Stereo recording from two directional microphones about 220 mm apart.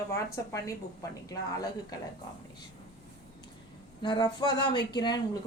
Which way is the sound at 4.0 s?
20° left (ahead or behind).